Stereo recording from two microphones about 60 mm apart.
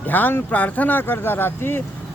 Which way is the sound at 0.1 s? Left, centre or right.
Left.